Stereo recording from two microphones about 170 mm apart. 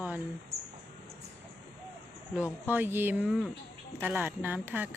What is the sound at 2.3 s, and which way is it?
Speech, 10° right (ahead or behind).